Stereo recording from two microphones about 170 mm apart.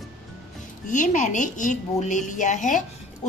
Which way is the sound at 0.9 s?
50° left (ahead or behind).